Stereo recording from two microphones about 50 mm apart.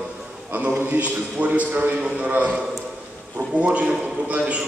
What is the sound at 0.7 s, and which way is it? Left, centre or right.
Speech, right.